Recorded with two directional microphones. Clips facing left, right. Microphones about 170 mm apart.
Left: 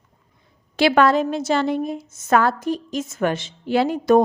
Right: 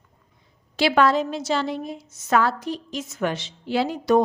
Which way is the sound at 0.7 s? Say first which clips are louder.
Left 3 dB; 55° left (ahead or behind).